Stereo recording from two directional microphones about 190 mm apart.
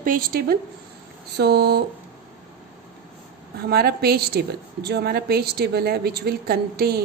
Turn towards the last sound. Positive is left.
turn(degrees=-55)  # may be behind; listen again after turning